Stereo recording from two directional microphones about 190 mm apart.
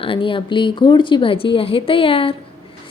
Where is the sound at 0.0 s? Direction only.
25° left (ahead or behind).